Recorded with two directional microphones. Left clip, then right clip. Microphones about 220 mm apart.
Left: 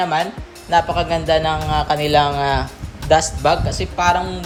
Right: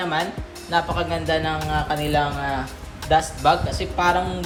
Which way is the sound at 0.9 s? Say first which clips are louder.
Left 6 dB; 15° left (ahead or behind).